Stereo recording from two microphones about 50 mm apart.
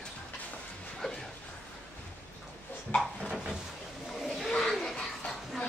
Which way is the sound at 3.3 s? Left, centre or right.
Centre.